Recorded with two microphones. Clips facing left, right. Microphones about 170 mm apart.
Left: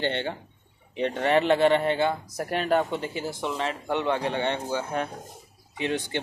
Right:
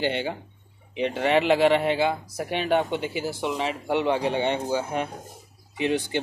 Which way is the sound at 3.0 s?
90° right.